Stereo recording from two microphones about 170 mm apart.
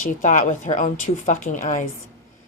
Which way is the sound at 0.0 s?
50° left (ahead or behind).